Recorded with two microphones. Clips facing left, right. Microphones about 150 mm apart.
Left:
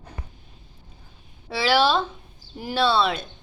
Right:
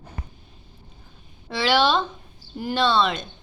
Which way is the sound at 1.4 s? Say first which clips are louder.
Even; 5° left (ahead or behind).